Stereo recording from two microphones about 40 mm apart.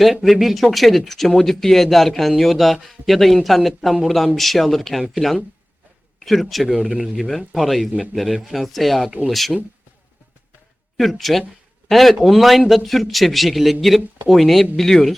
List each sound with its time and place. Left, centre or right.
0.0 s speech: centre
10.9 s speech: centre